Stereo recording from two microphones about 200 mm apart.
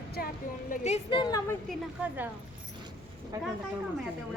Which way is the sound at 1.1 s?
20° left (ahead or behind).